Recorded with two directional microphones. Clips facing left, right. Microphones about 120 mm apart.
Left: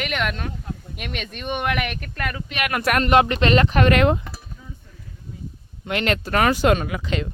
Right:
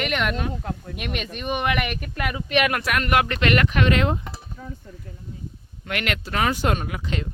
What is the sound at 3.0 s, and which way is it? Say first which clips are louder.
Speech: left 4 dB; 25° left (ahead or behind).